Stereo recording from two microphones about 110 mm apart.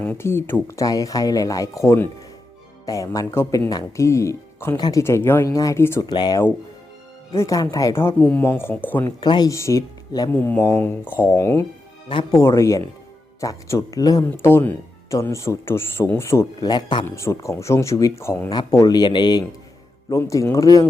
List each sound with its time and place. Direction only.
0.2 s speech: 20° left (ahead or behind)
0.8 s speech: 30° left (ahead or behind)
6.1 s speech: 40° left (ahead or behind)
8.2 s speech: 10° left (ahead or behind)
9.0 s speech: 40° left (ahead or behind)
14.3 s speech: 20° left (ahead or behind)
16.6 s speech: 40° left (ahead or behind)
17.1 s speech: 25° left (ahead or behind); by 19.5 s 40° left (ahead or behind)
20.1 s speech: 30° left (ahead or behind)